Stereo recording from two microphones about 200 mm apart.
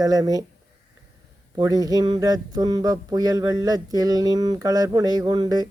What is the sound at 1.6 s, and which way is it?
Speech, 20° right (ahead or behind).